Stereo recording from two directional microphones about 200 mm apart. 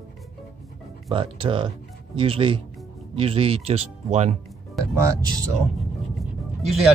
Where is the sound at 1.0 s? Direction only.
25° right (ahead or behind).